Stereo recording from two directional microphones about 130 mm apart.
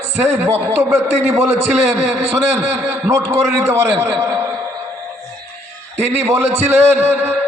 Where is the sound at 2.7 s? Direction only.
20° right (ahead or behind).